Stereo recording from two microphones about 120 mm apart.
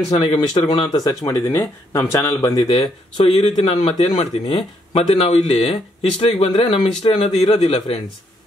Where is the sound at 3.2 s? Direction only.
60° left (ahead or behind).